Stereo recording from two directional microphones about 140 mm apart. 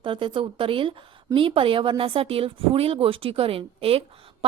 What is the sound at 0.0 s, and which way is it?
A woman's voice, 35° right (ahead or behind).